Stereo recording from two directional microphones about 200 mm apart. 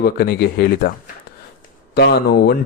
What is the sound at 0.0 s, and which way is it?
Speech, 50° left (ahead or behind).